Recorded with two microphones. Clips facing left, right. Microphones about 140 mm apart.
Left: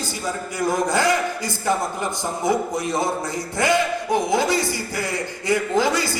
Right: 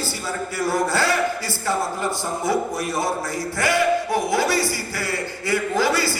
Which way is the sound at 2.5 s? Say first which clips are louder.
Left 2 dB; 20° left (ahead or behind).